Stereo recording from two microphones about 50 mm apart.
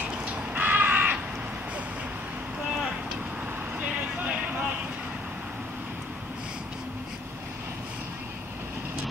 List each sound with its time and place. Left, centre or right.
0.0 s crow: right
4.2 s vehicle: right